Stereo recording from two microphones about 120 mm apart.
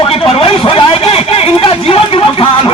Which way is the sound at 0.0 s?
50° left (ahead or behind).